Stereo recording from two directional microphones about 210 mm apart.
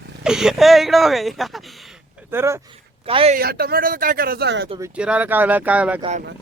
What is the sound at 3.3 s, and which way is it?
Speech, 45° right (ahead or behind).